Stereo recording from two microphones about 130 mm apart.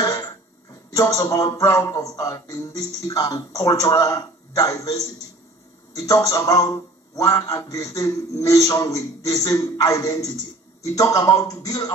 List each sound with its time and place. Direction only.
0.0 s a man's voice: 25° left (ahead or behind)
6.0 s a man's voice: 25° left (ahead or behind)